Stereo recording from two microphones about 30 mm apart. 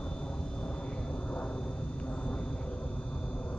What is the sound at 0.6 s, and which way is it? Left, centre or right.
Vehicle, left.